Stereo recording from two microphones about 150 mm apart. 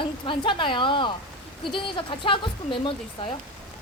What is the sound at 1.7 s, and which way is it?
Speech, 35° left (ahead or behind).